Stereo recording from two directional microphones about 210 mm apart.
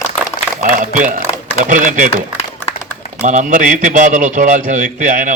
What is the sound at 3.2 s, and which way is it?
A man's voice, 35° right (ahead or behind).